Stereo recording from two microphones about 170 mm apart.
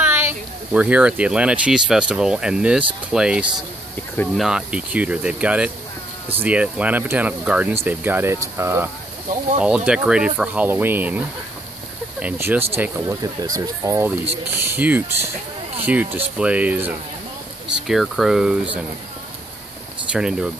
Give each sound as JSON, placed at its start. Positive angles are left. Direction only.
{"t": 0.0, "sound": "speech", "side_deg": -15}
{"t": 20.1, "sound": "speech", "side_deg": -5}